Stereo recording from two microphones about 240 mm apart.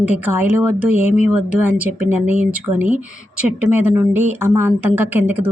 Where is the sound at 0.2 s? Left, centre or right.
Centre.